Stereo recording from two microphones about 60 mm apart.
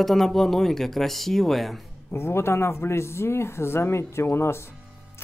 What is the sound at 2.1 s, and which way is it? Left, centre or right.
Speech, left.